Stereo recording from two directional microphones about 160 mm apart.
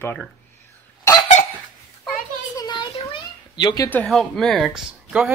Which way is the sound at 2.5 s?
25° left (ahead or behind).